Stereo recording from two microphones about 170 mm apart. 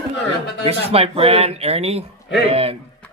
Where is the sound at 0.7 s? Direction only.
35° right (ahead or behind).